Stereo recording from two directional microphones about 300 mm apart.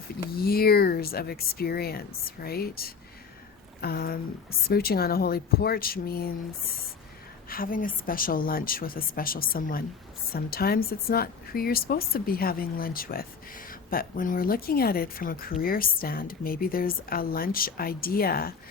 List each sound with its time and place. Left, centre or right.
0.3 s speech: left
7.5 s a woman's voice: left